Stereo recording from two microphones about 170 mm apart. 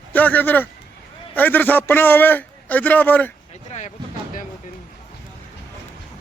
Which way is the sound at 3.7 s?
45° left (ahead or behind).